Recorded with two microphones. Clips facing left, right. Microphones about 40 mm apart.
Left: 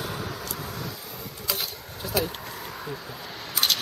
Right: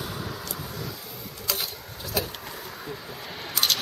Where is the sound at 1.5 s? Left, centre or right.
Centre.